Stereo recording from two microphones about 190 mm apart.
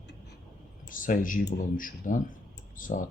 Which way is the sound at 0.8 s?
45° left (ahead or behind).